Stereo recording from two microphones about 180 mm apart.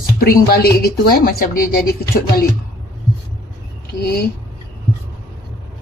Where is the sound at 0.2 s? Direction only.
60° left (ahead or behind).